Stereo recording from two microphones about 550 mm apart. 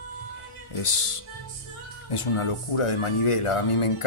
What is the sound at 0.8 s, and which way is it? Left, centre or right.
Speech, left.